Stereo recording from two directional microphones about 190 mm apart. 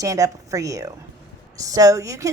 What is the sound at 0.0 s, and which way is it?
A woman's voice, 15° right (ahead or behind).